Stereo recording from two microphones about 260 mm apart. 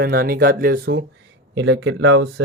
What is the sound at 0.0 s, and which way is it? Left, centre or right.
Speech, right.